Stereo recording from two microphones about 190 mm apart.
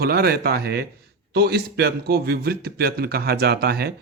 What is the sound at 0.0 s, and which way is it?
A man's voice, 55° right (ahead or behind).